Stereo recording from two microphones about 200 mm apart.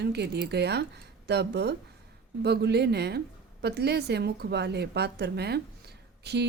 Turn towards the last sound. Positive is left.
turn(degrees=-55)  # may be behind; listen again after turning